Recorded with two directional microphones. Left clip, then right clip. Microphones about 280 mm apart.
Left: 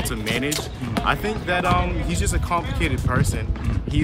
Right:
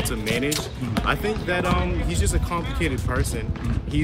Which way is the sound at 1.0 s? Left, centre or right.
Centre.